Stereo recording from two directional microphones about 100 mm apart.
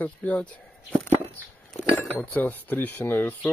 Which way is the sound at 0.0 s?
15° left (ahead or behind).